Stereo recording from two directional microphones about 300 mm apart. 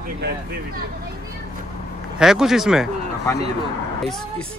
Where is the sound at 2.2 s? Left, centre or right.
Centre.